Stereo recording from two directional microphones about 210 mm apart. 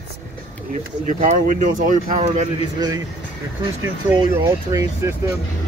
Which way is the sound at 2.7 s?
20° right (ahead or behind).